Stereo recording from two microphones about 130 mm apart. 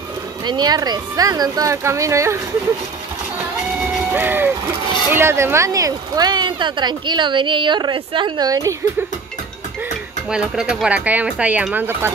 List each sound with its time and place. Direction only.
0.5 s speech: 30° right (ahead or behind)
4.1 s speech: 15° right (ahead or behind)
10.3 s speech: 5° right (ahead or behind)